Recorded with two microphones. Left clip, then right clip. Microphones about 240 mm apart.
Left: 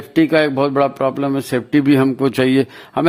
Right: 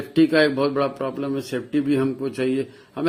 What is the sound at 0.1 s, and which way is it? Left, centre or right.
Speech, left.